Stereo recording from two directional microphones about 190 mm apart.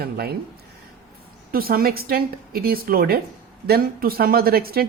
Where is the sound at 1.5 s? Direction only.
50° right (ahead or behind).